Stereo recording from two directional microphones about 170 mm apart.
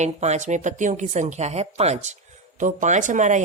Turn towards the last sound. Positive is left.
turn(degrees=-45)  # may be behind; listen again after turning